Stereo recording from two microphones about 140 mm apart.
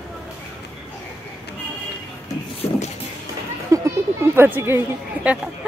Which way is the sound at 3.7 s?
25° right (ahead or behind).